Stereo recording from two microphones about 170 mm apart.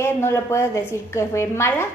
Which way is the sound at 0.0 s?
15° left (ahead or behind).